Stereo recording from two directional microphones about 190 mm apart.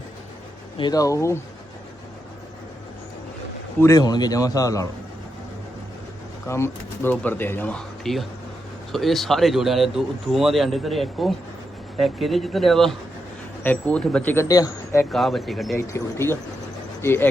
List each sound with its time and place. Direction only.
0.8 s speech: 20° left (ahead or behind)
3.8 s a man's voice: 15° left (ahead or behind)
6.5 s speech: 10° left (ahead or behind)
15.1 s speech: centre (ahead or behind)
15.7 s speech: 15° left (ahead or behind)